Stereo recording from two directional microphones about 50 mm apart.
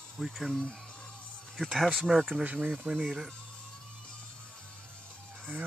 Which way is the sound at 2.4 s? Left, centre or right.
Right.